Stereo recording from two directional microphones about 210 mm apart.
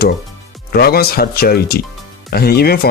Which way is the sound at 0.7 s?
45° left (ahead or behind).